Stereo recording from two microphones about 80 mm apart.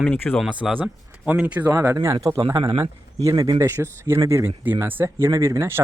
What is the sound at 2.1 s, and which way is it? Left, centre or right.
A man's voice, right.